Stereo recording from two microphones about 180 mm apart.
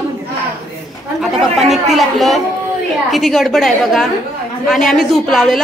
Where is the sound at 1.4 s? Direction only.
Centre (ahead or behind).